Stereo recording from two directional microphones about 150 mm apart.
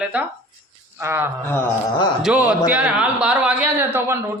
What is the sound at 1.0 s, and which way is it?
Speech, 15° right (ahead or behind).